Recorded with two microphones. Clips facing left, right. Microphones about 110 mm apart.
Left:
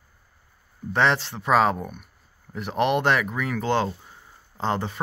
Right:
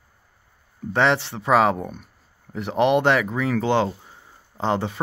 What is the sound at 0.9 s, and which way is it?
Speech, 20° right (ahead or behind).